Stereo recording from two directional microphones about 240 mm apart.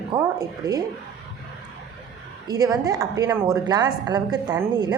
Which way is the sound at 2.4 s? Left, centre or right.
Centre.